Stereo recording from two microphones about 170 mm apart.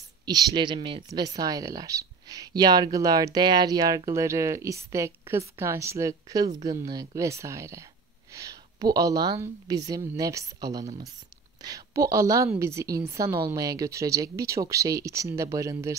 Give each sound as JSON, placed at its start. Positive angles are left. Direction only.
{"t": 0.2, "sound": "a woman's voice", "side_deg": -25}